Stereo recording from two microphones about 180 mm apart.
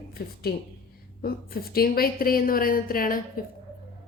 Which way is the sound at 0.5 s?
60° left (ahead or behind).